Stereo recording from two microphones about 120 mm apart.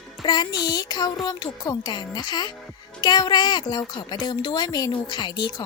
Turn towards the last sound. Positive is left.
turn(degrees=35)  # may be behind; listen again after turning